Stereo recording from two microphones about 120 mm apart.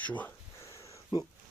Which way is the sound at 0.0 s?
15° left (ahead or behind).